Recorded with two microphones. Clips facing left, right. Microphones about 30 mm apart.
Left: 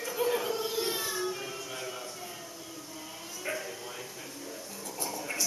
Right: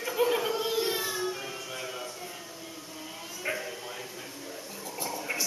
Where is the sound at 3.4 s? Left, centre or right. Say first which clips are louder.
Right 2 dB; centre.